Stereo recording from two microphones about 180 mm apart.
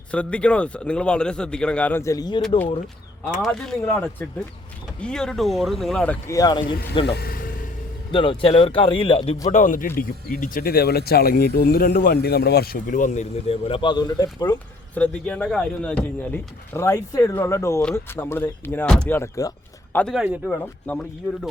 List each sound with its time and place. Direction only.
0.1 s speech: 5° left (ahead or behind)
3.4 s speech: 5° left (ahead or behind); by 6.7 s 25° left (ahead or behind)
7.0 s vehicle: 60° left (ahead or behind)
8.1 s speech: 30° left (ahead or behind)
9.5 s speech: 45° left (ahead or behind); by 14.6 s 20° left (ahead or behind)
14.9 s speech: 5° left (ahead or behind)
20.0 s speech: 5° left (ahead or behind)
20.2 s speech: 5° right (ahead or behind)
20.5 s speech: 10° left (ahead or behind)